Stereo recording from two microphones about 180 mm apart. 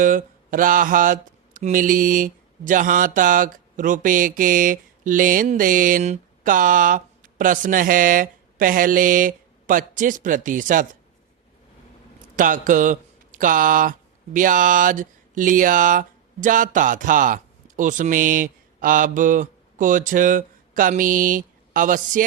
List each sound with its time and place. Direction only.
0.0 s speech: 45° right (ahead or behind)
12.4 s speech: 45° right (ahead or behind)